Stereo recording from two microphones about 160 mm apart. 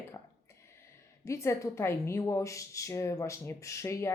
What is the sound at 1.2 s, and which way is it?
A woman's voice, 15° left (ahead or behind).